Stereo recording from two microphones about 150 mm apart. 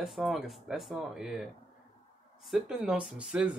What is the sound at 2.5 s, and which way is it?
Speech, 5° right (ahead or behind).